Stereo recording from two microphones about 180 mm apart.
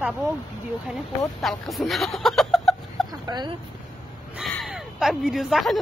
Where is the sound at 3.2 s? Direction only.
25° right (ahead or behind).